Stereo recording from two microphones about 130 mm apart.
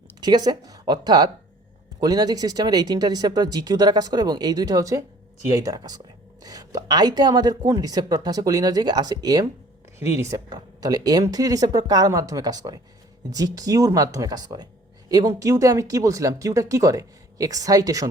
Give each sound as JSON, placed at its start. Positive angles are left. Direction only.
{"t": 0.2, "sound": "speech", "side_deg": -35}